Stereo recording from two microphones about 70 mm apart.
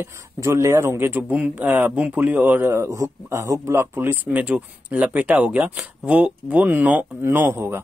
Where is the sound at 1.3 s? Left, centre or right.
Right.